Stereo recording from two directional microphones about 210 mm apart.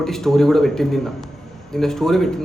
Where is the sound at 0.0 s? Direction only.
Centre (ahead or behind).